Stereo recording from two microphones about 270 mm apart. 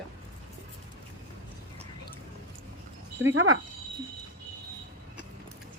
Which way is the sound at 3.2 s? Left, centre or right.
Right.